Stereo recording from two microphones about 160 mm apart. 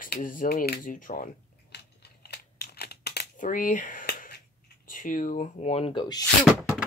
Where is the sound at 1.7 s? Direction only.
85° left.